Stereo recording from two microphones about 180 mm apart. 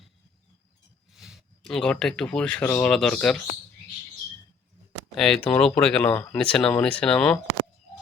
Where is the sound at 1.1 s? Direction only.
5° right (ahead or behind).